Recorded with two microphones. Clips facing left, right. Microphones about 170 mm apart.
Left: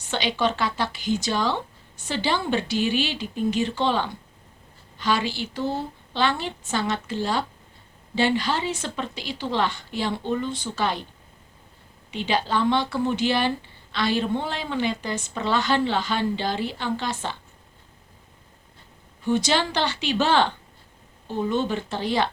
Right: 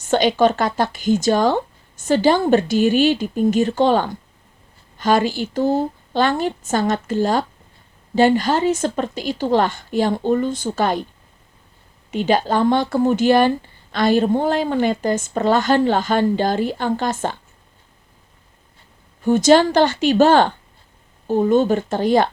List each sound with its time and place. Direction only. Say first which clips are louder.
0.0 s speech: right 9 dB; 45° right (ahead or behind)
12.1 s speech: right 7 dB; 45° right (ahead or behind)
19.2 s speech: right 10 dB; 45° right (ahead or behind)